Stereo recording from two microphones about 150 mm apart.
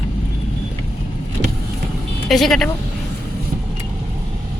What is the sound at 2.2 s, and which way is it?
Speech, centre (ahead or behind).